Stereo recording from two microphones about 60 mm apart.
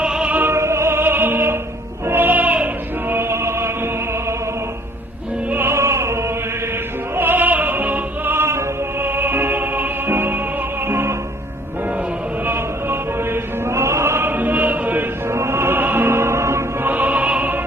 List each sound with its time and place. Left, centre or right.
0.0 s opera: centre
0.5 s opera: right
2.0 s music: right
3.1 s music: right
5.5 s opera: right
7.2 s opera: right
9.0 s music: right
12.5 s opera: right
15.3 s opera: right
16.8 s opera: right